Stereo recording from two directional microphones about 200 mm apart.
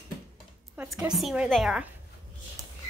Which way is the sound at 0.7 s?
5° right (ahead or behind).